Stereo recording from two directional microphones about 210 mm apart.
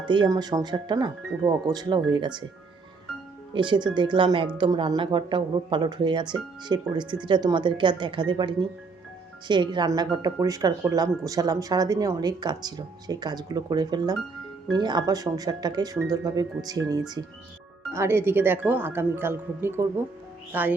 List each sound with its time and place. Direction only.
0.0 s speech: 20° right (ahead or behind)
3.5 s speech: 20° right (ahead or behind)